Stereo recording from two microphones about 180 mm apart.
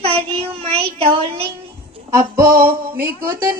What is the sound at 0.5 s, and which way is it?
Speech, 30° right (ahead or behind).